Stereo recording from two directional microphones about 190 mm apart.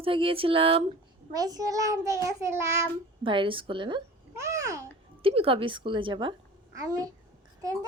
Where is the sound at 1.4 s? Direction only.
20° right (ahead or behind).